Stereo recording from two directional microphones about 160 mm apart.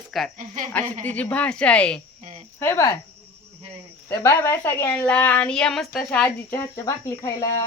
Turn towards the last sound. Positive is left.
turn(degrees=20)  # may be behind; listen again after turning